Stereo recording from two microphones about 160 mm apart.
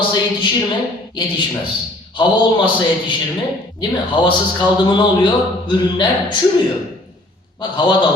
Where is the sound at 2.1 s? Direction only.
30° left (ahead or behind).